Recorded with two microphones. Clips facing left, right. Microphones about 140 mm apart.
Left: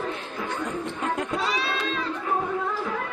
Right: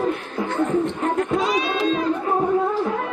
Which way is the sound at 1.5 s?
45° right (ahead or behind).